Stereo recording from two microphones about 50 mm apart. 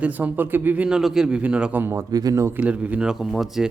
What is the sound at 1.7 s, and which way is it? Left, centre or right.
Speech, right.